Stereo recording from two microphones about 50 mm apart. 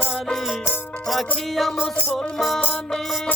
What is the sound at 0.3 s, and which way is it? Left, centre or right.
Music, centre.